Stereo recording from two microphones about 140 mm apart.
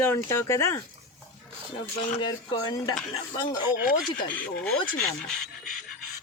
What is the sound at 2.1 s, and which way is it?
Speech, 30° left (ahead or behind).